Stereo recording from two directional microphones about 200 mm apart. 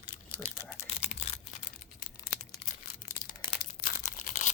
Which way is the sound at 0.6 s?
10° left (ahead or behind).